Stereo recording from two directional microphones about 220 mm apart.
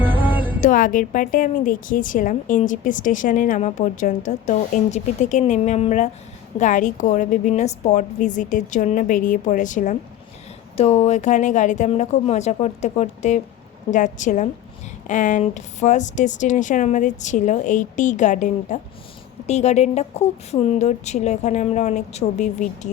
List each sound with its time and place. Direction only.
0.0 s music: 10° right (ahead or behind)
0.6 s a woman's voice: 35° left (ahead or behind)